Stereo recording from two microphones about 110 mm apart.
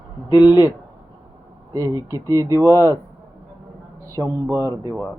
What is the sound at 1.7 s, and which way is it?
Speech, 30° right (ahead or behind).